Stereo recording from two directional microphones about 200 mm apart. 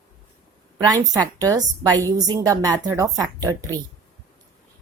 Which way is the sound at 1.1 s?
15° right (ahead or behind).